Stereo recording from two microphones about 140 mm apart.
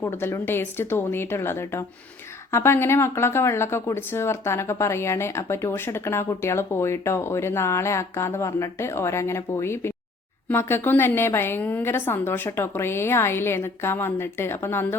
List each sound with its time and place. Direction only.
0.0 s a woman's voice: 15° left (ahead or behind)